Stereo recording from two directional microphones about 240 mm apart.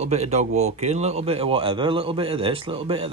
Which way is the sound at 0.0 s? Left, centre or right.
Right.